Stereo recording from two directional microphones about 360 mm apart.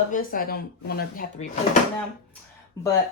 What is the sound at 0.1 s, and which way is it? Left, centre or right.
Speech, left.